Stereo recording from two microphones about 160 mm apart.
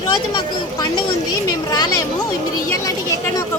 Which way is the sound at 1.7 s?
25° left (ahead or behind).